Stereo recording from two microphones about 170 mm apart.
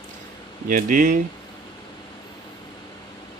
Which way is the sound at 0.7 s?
55° right (ahead or behind).